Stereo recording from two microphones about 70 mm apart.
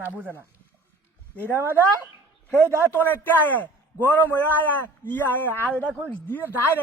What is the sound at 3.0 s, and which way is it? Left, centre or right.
A man's voice, left.